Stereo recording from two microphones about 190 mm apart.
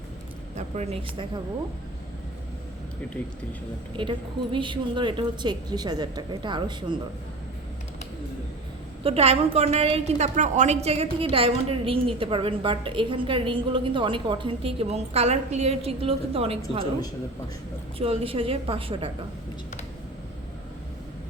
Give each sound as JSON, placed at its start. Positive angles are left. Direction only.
{"t": 0.5, "sound": "a sound", "side_deg": -35}
{"t": 4.0, "sound": "a woman's voice", "side_deg": -25}
{"t": 9.0, "sound": "a woman's voice", "side_deg": -30}
{"t": 17.9, "sound": "a woman's voice", "side_deg": -30}